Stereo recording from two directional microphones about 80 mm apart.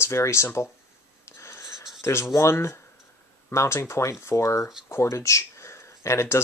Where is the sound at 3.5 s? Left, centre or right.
Left.